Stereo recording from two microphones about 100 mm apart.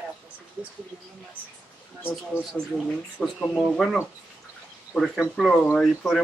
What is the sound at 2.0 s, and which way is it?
Speech, 15° left (ahead or behind).